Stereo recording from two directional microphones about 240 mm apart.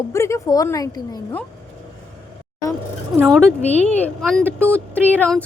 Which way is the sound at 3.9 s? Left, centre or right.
Centre.